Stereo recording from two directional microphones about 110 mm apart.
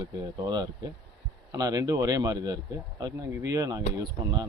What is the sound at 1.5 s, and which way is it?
Speech, 35° right (ahead or behind).